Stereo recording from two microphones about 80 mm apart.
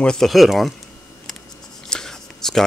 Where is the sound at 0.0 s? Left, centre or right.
Centre.